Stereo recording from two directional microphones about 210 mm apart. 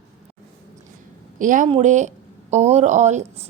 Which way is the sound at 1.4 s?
40° right (ahead or behind).